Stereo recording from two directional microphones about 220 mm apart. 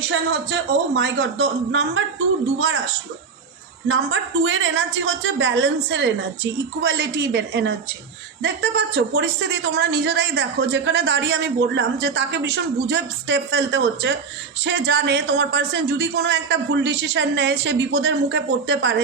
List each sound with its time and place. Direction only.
0.9 s a woman's voice: 55° right (ahead or behind)
3.8 s a woman's voice: 60° right (ahead or behind)